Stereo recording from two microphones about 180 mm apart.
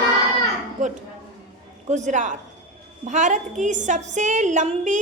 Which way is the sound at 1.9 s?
40° right (ahead or behind).